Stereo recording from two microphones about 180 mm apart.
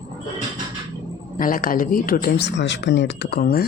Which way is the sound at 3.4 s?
60° left (ahead or behind).